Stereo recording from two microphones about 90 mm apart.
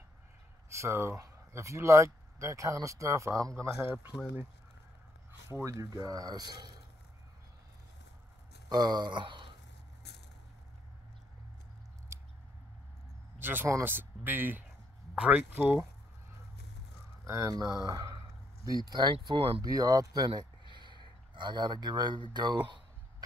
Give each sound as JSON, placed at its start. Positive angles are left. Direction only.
{"t": 0.7, "sound": "speech", "side_deg": -30}
{"t": 3.6, "sound": "speech", "side_deg": -25}
{"t": 5.5, "sound": "speech", "side_deg": -35}
{"t": 8.6, "sound": "speech", "side_deg": -50}
{"t": 13.4, "sound": "speech", "side_deg": -20}
{"t": 17.3, "sound": "speech", "side_deg": -35}
{"t": 17.8, "sound": "speech", "side_deg": -45}
{"t": 19.6, "sound": "speech", "side_deg": -45}
{"t": 20.7, "sound": "a sound", "side_deg": -60}
{"t": 22.3, "sound": "speech", "side_deg": -55}